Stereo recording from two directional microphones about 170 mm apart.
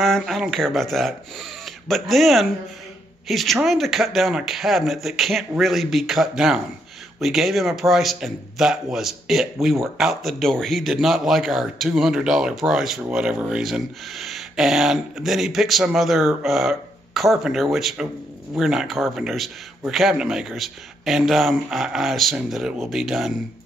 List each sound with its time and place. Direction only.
0.0 s speech: centre (ahead or behind)